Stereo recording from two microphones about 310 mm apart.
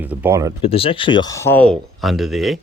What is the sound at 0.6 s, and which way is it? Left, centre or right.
Speech, centre.